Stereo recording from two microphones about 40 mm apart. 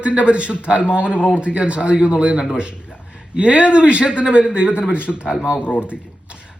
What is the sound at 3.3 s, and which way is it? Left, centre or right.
Speech, right.